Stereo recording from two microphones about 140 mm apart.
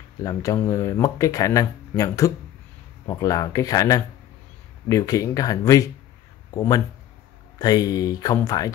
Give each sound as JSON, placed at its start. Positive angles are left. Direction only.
{"t": 0.2, "sound": "speech", "side_deg": 25}